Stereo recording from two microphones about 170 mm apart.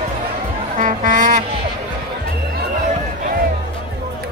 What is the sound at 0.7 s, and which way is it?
Music, 50° right (ahead or behind).